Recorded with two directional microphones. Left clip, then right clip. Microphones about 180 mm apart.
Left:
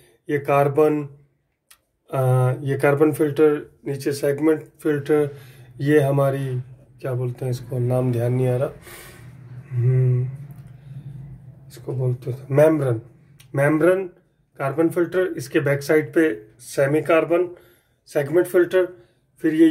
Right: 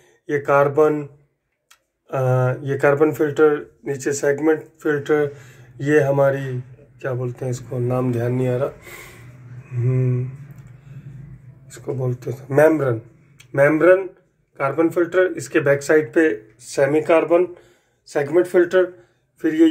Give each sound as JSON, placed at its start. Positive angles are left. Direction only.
{"t": 0.3, "sound": "speech", "side_deg": 20}
{"t": 2.0, "sound": "speech", "side_deg": 20}
{"t": 11.6, "sound": "a sound", "side_deg": 10}
{"t": 12.4, "sound": "speech", "side_deg": 10}